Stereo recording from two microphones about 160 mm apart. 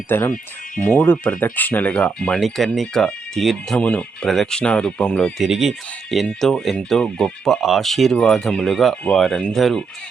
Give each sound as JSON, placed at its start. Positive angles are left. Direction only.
{"t": 0.1, "sound": "speech", "side_deg": 15}